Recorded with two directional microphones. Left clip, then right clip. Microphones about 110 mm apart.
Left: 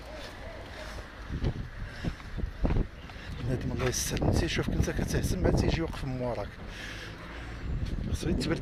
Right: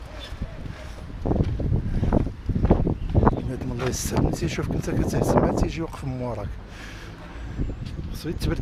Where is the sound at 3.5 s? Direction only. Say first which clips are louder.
Right 3 dB; 50° right (ahead or behind).